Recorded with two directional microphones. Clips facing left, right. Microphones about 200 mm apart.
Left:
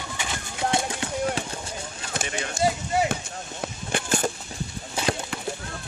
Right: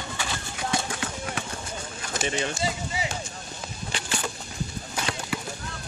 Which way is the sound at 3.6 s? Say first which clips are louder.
Left 7 dB; 50° left (ahead or behind).